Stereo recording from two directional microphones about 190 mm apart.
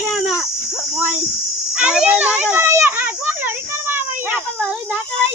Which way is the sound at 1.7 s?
5° right (ahead or behind).